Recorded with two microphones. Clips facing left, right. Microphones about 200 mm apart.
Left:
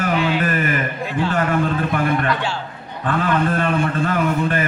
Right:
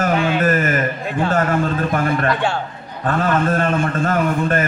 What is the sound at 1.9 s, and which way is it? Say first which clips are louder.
A man's voice: right 1 dB; 45° right (ahead or behind).